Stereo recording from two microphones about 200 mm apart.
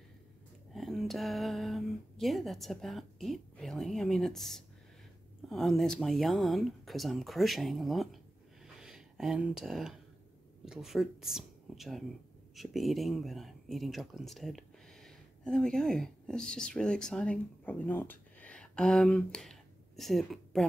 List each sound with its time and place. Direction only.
0.7 s speech: centre (ahead or behind)